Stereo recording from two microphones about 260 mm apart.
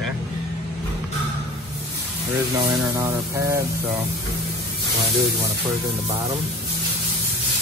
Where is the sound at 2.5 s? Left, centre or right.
Centre.